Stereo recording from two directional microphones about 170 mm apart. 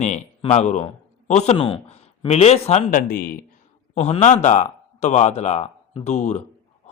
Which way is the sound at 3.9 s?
40° left (ahead or behind).